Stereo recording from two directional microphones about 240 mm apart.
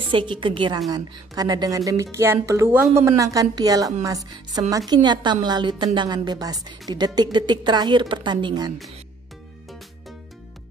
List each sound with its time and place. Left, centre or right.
0.1 s a woman's voice: right